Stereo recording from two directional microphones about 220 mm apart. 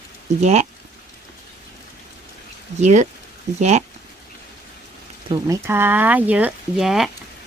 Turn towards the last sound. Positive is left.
turn(degrees=0)  # may be behind; listen again after turning